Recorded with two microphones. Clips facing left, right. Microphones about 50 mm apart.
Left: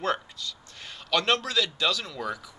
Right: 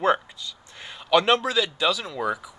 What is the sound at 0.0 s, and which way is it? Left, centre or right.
A man's voice, centre.